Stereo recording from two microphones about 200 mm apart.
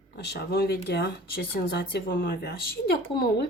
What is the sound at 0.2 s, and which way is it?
Speech, 55° left (ahead or behind).